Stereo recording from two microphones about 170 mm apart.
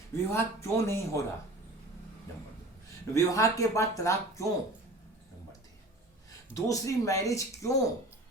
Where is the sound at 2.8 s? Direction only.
20° left (ahead or behind).